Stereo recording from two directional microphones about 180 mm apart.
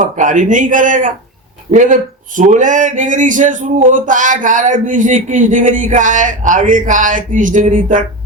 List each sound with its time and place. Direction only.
0.0 s speech: 45° right (ahead or behind)